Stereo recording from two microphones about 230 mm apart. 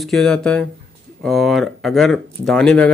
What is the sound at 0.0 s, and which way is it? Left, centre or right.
Speech, centre.